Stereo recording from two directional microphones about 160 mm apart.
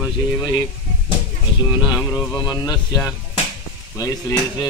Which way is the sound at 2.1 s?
25° left (ahead or behind).